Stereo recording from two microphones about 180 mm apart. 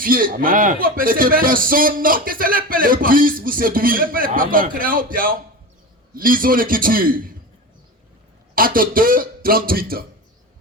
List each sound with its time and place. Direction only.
0.0 s a man's voice: 50° right (ahead or behind)
8.5 s a man's voice: 50° right (ahead or behind)